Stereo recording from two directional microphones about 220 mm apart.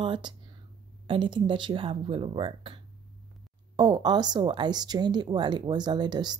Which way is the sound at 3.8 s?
20° right (ahead or behind).